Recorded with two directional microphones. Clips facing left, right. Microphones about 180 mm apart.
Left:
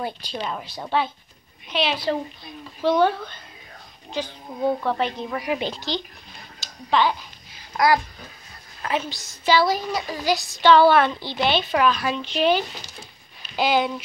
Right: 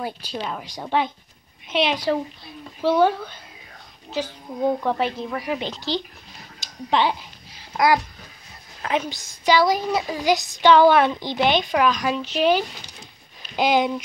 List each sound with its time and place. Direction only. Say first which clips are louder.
0.0 s a woman's voice: even; 5° right (ahead or behind)
5.5 s speech: left 3 dB; 10° left (ahead or behind)
6.6 s speech: even; 20° right (ahead or behind)